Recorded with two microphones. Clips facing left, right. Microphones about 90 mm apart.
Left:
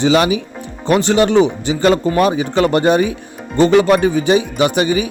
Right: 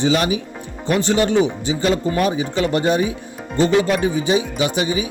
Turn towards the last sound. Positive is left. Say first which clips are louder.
# left 5 dB
turn(degrees=60)  # may be behind; listen again after turning